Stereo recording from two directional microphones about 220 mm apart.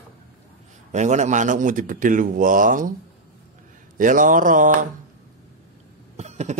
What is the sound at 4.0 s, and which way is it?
Speech, 35° right (ahead or behind).